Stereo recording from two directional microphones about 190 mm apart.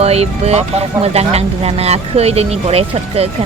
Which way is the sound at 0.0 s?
35° right (ahead or behind).